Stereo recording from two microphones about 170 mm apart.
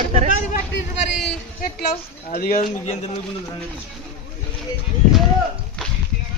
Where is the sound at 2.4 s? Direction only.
55° left (ahead or behind).